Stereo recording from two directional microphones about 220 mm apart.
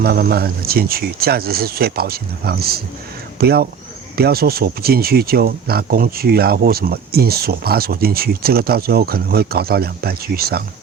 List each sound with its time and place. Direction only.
0.0 s speech: 45° right (ahead or behind)